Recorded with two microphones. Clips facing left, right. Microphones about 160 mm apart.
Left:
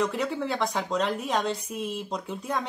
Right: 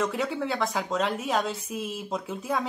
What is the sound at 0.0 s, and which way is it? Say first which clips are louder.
A woman's voice: even; centre (ahead or behind).